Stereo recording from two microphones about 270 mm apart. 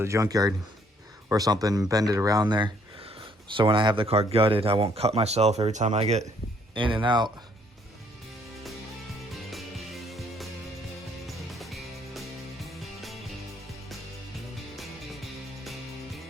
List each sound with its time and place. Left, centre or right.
0.0 s speech: centre
9.3 s music: centre